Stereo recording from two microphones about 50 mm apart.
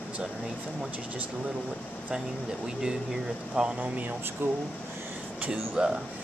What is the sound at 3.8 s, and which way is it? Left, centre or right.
Speech, right.